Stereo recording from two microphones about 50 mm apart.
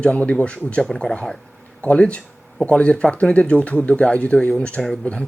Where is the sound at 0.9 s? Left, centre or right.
Centre.